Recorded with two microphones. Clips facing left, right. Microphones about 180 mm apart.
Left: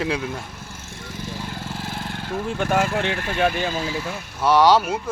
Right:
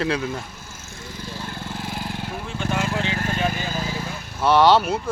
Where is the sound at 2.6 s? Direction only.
55° left (ahead or behind).